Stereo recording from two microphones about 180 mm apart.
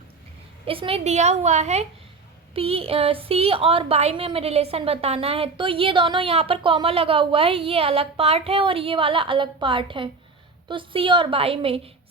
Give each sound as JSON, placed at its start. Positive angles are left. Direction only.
{"t": 0.6, "sound": "a woman's voice", "side_deg": -30}